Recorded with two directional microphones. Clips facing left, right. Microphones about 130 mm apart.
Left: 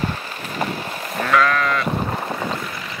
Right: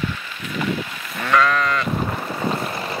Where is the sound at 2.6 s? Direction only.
35° right (ahead or behind).